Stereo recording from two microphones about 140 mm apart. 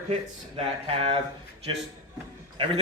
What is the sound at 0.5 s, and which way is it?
Speech, 45° right (ahead or behind).